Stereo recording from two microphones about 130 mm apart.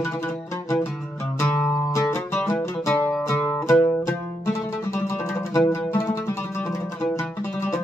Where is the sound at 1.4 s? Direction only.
15° left (ahead or behind).